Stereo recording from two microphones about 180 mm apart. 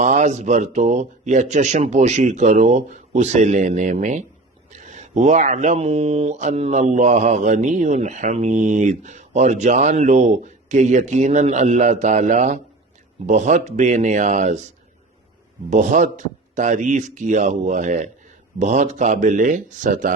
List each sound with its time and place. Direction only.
0.0 s a man's voice: 40° right (ahead or behind)
15.7 s a man's voice: 45° right (ahead or behind)